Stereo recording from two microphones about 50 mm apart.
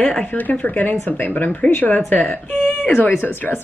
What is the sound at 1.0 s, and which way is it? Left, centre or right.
Speech, left.